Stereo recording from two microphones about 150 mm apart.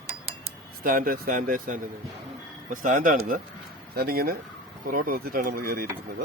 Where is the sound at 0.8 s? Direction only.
70° right (ahead or behind).